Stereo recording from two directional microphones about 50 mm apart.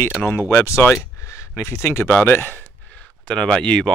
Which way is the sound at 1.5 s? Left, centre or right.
Left.